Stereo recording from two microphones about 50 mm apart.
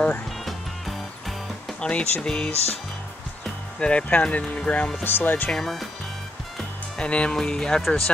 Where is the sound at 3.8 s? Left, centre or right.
Left.